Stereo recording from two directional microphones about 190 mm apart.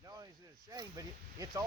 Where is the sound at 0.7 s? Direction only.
20° right (ahead or behind).